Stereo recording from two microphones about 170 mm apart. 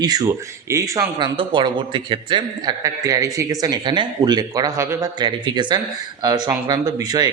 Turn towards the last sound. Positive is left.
turn(degrees=-25)  # may be behind; listen again after turning